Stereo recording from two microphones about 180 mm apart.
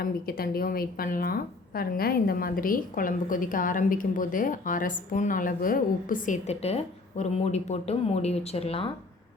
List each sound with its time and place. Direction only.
0.0 s a woman's voice: 55° left (ahead or behind); by 8.9 s 35° left (ahead or behind)